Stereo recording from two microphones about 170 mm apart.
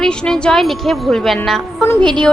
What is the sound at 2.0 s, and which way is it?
Speech, 25° right (ahead or behind).